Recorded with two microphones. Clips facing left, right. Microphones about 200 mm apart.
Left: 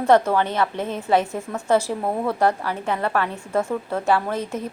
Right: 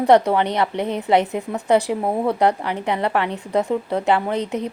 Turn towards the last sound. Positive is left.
turn(degrees=-20)  # may be behind; listen again after turning